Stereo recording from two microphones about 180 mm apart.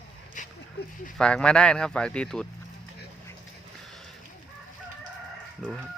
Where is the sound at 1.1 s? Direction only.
5° left (ahead or behind).